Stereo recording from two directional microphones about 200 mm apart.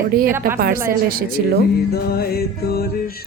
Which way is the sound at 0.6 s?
45° right (ahead or behind).